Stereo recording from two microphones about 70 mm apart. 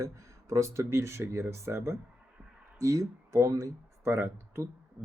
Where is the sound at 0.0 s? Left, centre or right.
Right.